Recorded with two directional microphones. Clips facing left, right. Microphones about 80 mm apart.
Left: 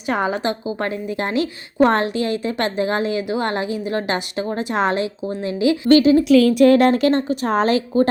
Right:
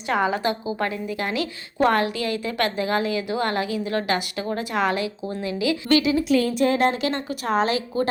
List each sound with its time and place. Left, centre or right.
0.1 s a woman's voice: left
5.9 s a woman's voice: left
6.2 s a woman's voice: left